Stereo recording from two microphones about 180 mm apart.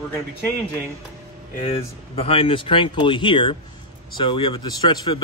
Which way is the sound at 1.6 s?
30° left (ahead or behind).